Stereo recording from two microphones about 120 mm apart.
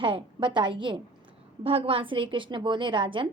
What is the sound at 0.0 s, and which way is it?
A woman's voice, 45° right (ahead or behind).